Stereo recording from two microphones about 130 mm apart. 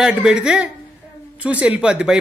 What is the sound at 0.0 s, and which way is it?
Speech, 5° right (ahead or behind).